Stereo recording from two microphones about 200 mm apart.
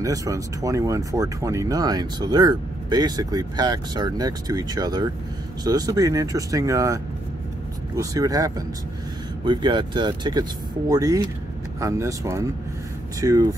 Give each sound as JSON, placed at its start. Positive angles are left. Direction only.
{"t": 0.0, "sound": "speech", "side_deg": -15}